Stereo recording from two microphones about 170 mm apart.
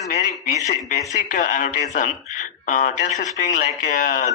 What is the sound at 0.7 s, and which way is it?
Speech, 45° left (ahead or behind).